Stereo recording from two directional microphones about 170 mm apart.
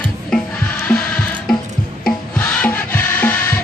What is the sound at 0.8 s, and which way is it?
Music, 5° left (ahead or behind).